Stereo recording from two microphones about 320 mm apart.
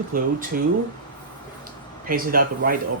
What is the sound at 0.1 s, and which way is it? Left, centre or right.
Speech, right.